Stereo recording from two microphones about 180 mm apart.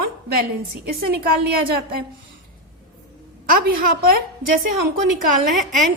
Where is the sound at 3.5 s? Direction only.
50° right (ahead or behind).